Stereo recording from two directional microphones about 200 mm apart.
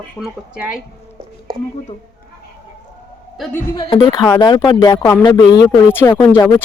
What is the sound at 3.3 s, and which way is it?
Speech, centre (ahead or behind).